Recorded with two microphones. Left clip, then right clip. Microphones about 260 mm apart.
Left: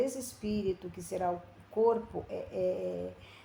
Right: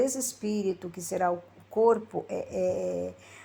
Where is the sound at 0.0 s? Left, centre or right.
Right.